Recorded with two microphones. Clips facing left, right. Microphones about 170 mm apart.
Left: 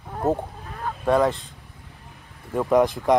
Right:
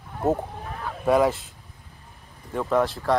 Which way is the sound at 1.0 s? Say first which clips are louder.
Even; 5° right (ahead or behind).